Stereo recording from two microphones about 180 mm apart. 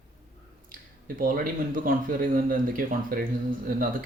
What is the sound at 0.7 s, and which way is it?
Speech, 50° right (ahead or behind).